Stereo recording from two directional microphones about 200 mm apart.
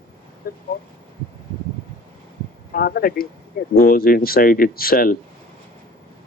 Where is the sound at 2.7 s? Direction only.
50° left (ahead or behind).